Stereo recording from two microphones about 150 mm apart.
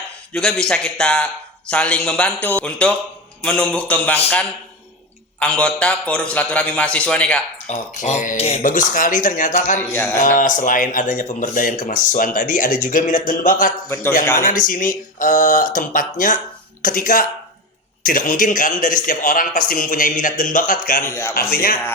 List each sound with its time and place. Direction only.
0.3 s a man's voice: 5° left (ahead or behind)
5.4 s a man's voice: 5° left (ahead or behind)
7.7 s speech: 50° left (ahead or behind)
8.4 s speech: 45° left (ahead or behind)
8.6 s speech: 65° left (ahead or behind)
21.1 s a man's voice: 15° left (ahead or behind)
21.3 s speech: 85° left